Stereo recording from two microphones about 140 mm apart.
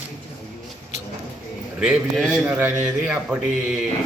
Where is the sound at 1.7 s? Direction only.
5° right (ahead or behind).